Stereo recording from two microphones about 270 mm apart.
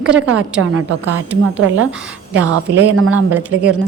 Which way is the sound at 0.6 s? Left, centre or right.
Right.